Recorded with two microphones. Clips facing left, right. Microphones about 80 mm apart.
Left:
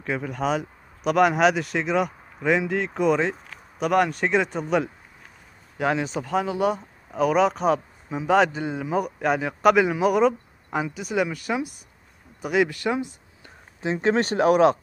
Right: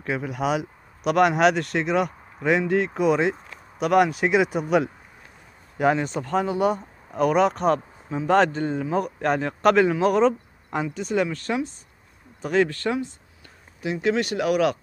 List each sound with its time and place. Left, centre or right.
0.0 s speech: centre
13.9 s speech: left